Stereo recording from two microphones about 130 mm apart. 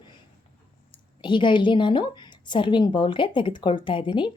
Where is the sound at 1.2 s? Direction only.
40° left (ahead or behind).